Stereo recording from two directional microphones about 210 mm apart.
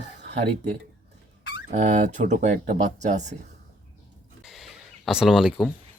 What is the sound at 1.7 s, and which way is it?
Speech, 35° right (ahead or behind).